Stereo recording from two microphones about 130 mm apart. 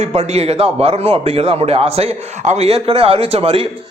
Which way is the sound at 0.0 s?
55° right (ahead or behind).